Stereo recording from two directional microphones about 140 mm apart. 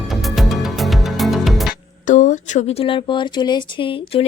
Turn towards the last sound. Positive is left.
turn(degrees=40)  # may be behind; listen again after turning